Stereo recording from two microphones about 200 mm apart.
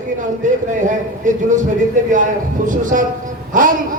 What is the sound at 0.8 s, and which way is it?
A man's voice, 40° right (ahead or behind).